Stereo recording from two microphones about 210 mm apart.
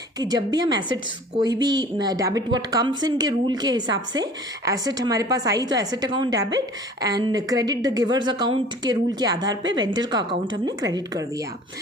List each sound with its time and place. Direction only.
0.2 s a woman's voice: 20° right (ahead or behind)